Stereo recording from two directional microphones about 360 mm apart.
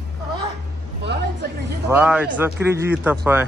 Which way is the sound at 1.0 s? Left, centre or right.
Right.